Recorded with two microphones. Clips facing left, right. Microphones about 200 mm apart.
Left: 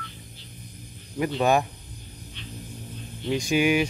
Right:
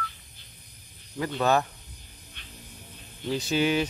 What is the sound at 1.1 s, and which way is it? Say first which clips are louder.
Speech: left 2 dB; 15° left (ahead or behind).